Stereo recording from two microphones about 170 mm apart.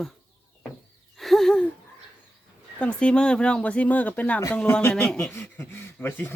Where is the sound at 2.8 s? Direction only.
5° left (ahead or behind).